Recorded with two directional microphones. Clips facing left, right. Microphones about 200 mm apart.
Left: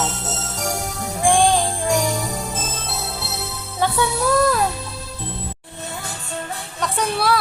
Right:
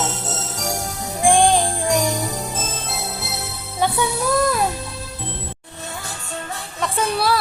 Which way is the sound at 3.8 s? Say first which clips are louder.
Even; 15° right (ahead or behind).